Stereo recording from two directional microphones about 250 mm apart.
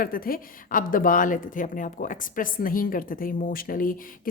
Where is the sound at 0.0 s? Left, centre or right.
Left.